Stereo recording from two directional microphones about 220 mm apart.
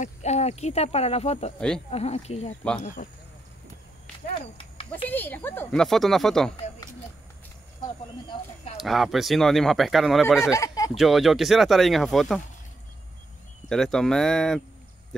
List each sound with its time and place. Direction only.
0.0 s speech: 30° left (ahead or behind)
4.6 s a sound: 25° left (ahead or behind)
5.1 s speech: 10° left (ahead or behind)
6.5 s a sound: 20° left (ahead or behind)
8.7 s speech: centre (ahead or behind)
10.4 s speech: 15° left (ahead or behind)
11.0 s speech: centre (ahead or behind)
13.7 s speech: centre (ahead or behind)